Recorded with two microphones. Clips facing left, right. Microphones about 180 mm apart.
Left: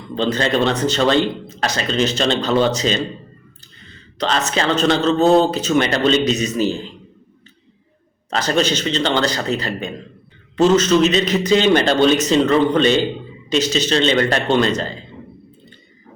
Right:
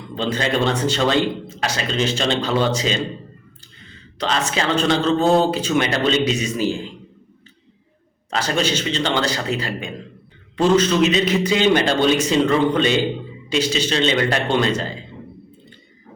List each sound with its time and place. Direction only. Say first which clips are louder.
0.2 s a man's voice: left 3 dB; 10° right (ahead or behind)
4.2 s a man's voice: left 2 dB; 10° right (ahead or behind)
8.3 s a man's voice: left 3 dB; 10° right (ahead or behind)